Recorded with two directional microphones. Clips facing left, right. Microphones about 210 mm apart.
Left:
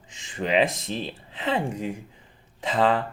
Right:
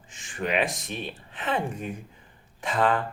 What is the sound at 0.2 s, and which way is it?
Speech, 25° left (ahead or behind).